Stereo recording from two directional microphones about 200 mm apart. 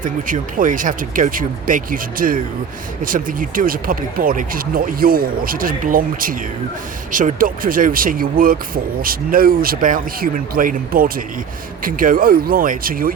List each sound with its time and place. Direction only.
0.0 s speech: 40° right (ahead or behind)